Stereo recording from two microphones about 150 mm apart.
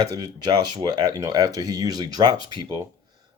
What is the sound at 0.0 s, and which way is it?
A man's voice, 25° right (ahead or behind).